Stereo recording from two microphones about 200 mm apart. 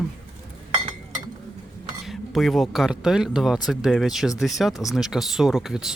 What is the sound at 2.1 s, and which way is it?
Speech, centre (ahead or behind).